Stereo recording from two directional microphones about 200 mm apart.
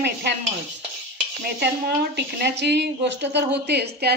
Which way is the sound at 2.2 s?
55° right (ahead or behind).